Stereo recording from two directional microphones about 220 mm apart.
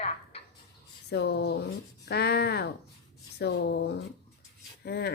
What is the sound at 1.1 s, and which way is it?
A woman's voice, 50° left (ahead or behind).